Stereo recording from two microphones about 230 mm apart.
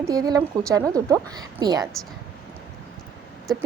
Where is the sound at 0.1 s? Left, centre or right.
Centre.